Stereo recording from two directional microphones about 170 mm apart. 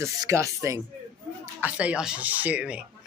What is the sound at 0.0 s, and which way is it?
Speech, 15° right (ahead or behind).